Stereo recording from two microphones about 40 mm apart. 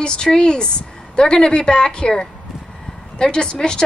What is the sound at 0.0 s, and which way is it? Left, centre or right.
Speech, left.